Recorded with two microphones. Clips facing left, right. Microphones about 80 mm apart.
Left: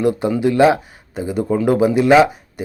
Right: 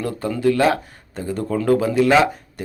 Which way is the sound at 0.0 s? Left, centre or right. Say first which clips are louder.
Left 4 dB; centre.